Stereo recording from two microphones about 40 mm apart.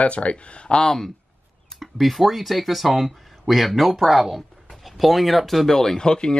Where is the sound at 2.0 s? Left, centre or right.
Centre.